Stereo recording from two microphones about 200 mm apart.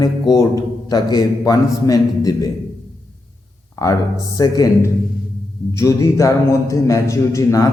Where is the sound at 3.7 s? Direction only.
15° left (ahead or behind).